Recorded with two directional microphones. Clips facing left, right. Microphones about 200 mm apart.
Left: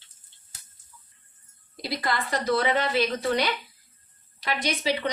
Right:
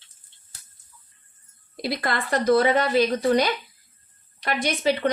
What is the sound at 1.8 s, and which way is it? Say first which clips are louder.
A woman's voice: right 2 dB; 55° right (ahead or behind).